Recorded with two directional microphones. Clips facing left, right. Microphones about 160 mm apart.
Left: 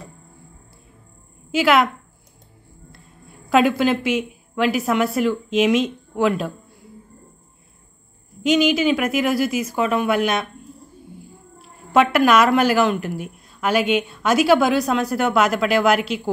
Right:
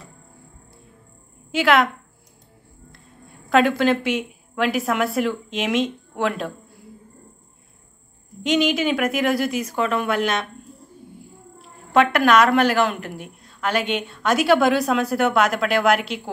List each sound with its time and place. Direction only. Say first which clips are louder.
1.5 s a woman's voice: left 1 dB; 5° left (ahead or behind)
3.4 s a woman's voice: left 1 dB; 5° left (ahead or behind)
8.4 s a woman's voice: left 3 dB; 5° left (ahead or behind)
11.5 s a woman's voice: left 1 dB; 5° left (ahead or behind)